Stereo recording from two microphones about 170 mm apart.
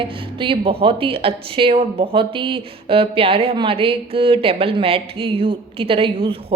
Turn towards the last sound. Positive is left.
turn(degrees=-30)  # may be behind; listen again after turning